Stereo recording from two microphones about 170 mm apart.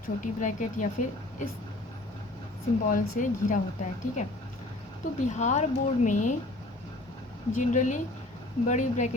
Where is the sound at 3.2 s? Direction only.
50° left (ahead or behind).